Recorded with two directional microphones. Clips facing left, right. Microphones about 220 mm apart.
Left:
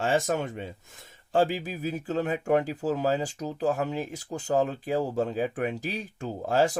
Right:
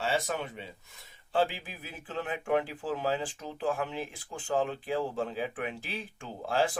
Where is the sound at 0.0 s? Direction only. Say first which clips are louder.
Left 6 dB; 45° left (ahead or behind).